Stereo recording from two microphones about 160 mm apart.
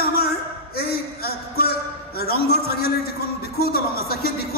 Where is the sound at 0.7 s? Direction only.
75° left (ahead or behind).